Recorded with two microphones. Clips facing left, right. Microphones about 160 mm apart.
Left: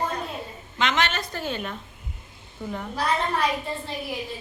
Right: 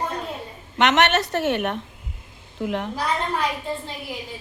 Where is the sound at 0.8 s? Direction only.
70° right (ahead or behind).